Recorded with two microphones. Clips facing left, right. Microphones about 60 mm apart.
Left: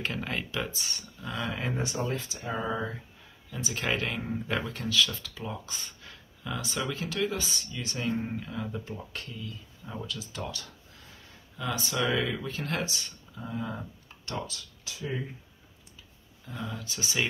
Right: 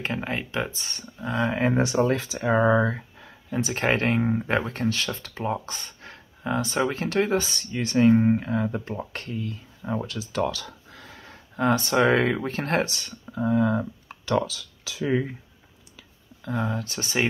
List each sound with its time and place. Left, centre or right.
0.0 s speech: right
1.8 s speech: right
3.4 s speech: right
16.0 s a sound: right
16.6 s speech: right